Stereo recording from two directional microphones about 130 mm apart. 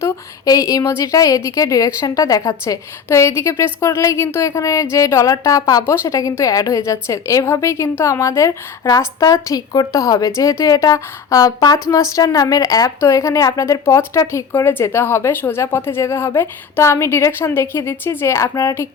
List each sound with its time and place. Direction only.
0.0 s a woman's voice: 25° left (ahead or behind)